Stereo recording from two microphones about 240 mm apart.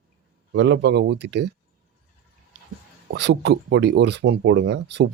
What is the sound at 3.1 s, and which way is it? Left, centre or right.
Speech, right.